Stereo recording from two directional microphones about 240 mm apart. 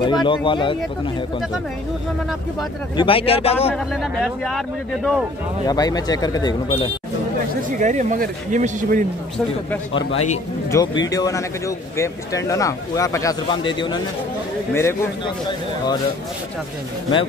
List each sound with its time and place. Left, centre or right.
0.0 s speech: centre
3.0 s speech: left
3.7 s speech: centre
5.7 s speech: centre
7.8 s speech: right
10.7 s speech: centre